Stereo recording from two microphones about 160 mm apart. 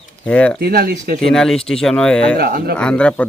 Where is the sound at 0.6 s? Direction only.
75° right (ahead or behind).